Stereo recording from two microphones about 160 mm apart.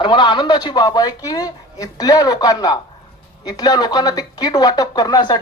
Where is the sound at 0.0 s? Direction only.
30° left (ahead or behind).